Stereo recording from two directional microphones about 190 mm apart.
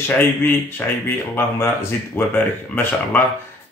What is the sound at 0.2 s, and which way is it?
Speech, 10° left (ahead or behind).